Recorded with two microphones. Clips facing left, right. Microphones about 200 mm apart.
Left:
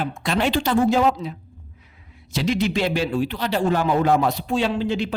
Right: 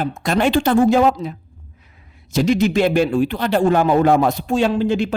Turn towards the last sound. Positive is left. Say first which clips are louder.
# right 5 dB
turn(degrees=-50)  # may be behind; listen again after turning